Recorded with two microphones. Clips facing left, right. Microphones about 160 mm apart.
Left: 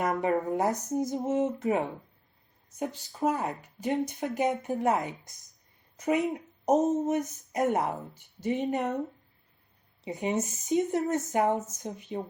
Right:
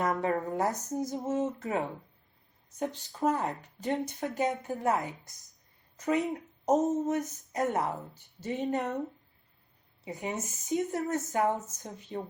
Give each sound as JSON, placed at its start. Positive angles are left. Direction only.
{"t": 0.0, "sound": "speech", "side_deg": 15}
{"t": 3.1, "sound": "speech", "side_deg": 0}
{"t": 3.8, "sound": "speech", "side_deg": 15}
{"t": 10.0, "sound": "speech", "side_deg": 20}